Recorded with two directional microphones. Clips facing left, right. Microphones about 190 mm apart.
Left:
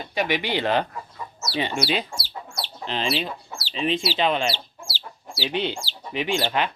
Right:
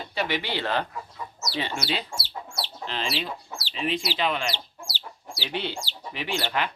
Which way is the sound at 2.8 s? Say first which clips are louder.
Left 5 dB; 20° left (ahead or behind).